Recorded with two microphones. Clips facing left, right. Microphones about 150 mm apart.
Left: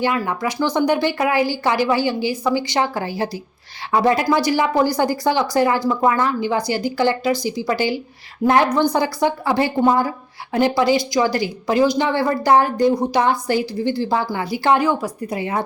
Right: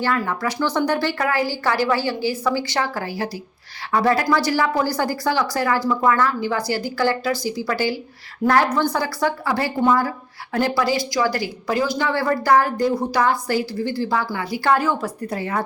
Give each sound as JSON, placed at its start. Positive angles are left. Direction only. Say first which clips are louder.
{"t": 0.0, "sound": "a woman's voice", "louder": "left 2 dB", "side_deg": 15}